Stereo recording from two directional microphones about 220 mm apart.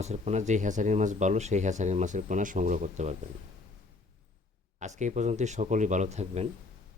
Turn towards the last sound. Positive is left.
turn(degrees=-30)  # may be behind; listen again after turning